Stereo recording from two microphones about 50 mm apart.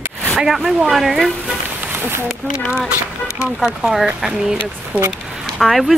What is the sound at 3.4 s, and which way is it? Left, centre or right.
Speech, centre.